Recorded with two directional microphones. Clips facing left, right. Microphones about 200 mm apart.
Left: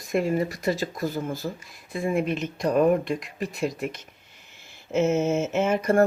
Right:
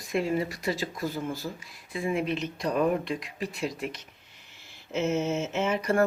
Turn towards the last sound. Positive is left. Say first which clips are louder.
# left 4 dB
turn(degrees=45)  # may be behind; listen again after turning